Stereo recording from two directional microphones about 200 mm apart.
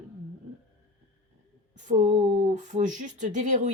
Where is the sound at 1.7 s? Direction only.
40° right (ahead or behind).